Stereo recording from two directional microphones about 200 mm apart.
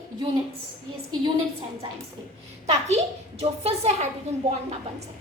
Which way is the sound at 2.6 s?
35° right (ahead or behind).